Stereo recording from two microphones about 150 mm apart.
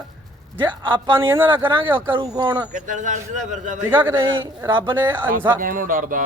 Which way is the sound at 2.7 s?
55° right (ahead or behind).